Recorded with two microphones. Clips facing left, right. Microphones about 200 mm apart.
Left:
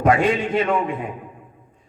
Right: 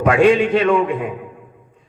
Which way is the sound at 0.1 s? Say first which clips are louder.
Right 7 dB; 80° right.